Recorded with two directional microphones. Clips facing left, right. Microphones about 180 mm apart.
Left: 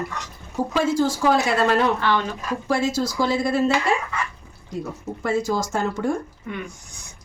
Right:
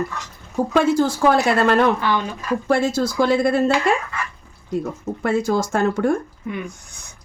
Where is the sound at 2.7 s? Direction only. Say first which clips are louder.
Right 3 dB; 55° right (ahead or behind).